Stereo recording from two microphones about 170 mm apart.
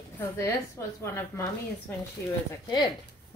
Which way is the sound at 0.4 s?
15° left (ahead or behind).